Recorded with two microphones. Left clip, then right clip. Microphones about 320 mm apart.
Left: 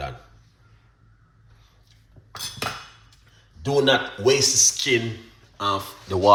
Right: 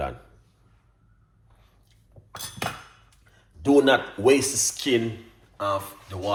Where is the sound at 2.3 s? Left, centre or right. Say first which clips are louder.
Left 3 dB; right.